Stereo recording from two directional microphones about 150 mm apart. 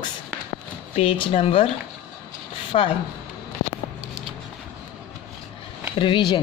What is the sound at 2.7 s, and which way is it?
Speech, 40° left (ahead or behind).